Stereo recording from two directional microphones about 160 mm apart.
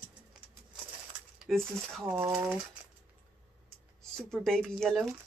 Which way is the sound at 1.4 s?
Centre (ahead or behind).